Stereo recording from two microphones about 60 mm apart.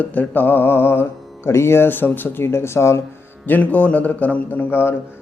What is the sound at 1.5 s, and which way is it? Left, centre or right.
Mantra, left.